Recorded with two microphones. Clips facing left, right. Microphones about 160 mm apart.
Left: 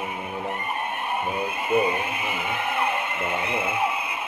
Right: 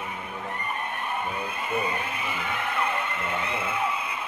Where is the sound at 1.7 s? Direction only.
15° left (ahead or behind).